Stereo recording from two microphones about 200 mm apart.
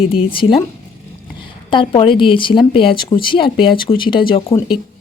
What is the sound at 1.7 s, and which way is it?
Speech, 25° left (ahead or behind).